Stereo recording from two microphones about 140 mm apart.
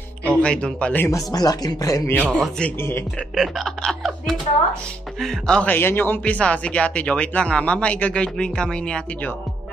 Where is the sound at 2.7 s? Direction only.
15° left (ahead or behind).